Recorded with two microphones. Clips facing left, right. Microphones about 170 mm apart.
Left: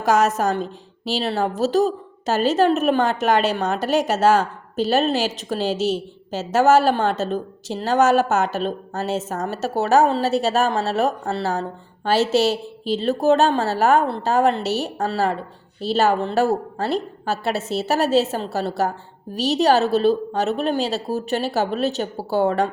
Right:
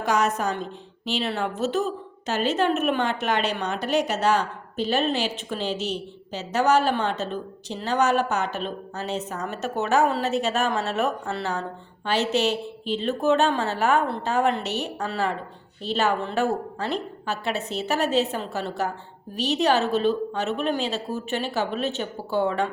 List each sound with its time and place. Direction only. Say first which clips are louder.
0.0 s a woman's voice: left 5 dB; 40° left (ahead or behind)